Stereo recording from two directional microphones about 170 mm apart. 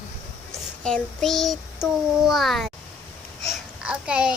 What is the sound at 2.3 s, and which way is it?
Speech, centre (ahead or behind).